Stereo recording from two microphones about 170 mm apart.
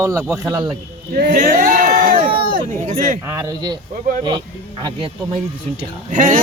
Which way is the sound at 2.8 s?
50° right (ahead or behind).